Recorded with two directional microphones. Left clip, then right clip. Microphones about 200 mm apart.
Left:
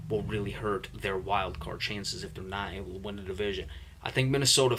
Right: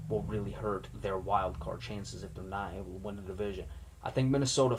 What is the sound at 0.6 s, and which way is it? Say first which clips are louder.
Speech: left 3 dB; 30° left (ahead or behind).